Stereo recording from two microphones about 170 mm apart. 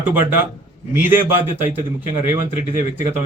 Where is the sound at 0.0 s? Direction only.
10° right (ahead or behind).